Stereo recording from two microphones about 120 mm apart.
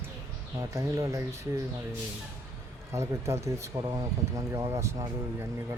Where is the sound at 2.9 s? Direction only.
25° right (ahead or behind).